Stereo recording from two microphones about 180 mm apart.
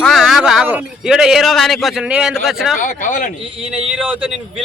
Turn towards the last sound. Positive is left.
turn(degrees=-5)  # may be behind; listen again after turning